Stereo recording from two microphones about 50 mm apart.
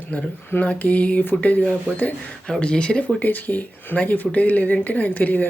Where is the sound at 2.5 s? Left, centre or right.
Left.